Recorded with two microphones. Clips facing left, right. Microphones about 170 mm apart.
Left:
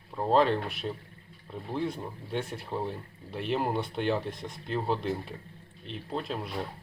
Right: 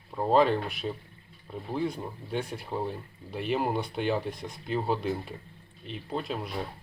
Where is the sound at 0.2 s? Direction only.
5° right (ahead or behind).